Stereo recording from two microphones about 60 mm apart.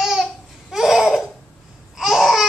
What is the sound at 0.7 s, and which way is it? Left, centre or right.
Laughter, centre.